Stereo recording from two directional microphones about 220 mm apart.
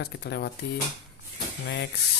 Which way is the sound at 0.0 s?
50° left (ahead or behind).